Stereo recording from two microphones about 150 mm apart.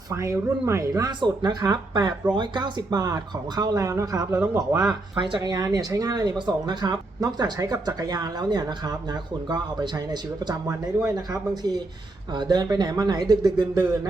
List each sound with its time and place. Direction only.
0.1 s speech: 20° right (ahead or behind)
4.8 s speech: 30° right (ahead or behind)